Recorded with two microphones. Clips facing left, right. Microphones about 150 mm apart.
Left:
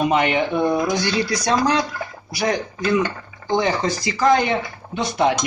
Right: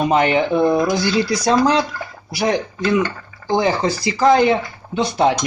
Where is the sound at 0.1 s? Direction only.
35° right (ahead or behind).